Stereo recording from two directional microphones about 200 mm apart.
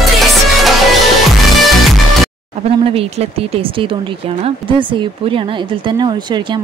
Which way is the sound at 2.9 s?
30° right (ahead or behind).